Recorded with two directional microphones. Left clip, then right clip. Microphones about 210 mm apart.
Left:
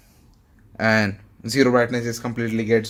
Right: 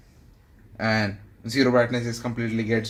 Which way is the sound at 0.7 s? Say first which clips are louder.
Left 5 dB; 50° left (ahead or behind).